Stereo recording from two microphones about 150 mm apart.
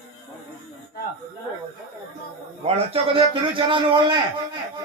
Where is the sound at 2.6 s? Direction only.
35° right (ahead or behind).